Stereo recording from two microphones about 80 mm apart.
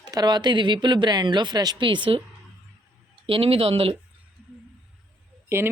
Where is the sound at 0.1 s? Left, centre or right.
Right.